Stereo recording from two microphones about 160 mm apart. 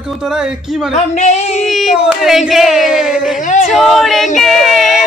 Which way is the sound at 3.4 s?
50° left (ahead or behind).